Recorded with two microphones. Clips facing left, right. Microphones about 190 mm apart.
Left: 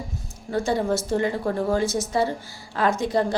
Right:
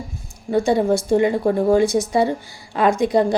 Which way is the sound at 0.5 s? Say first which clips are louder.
Right 6 dB; 15° right (ahead or behind).